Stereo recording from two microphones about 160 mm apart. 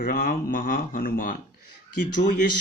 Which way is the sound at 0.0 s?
60° left (ahead or behind).